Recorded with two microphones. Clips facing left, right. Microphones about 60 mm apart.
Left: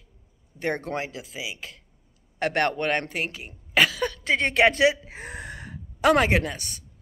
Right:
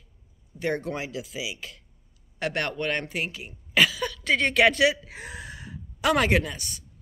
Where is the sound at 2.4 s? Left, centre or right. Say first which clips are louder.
Left 4 dB; left.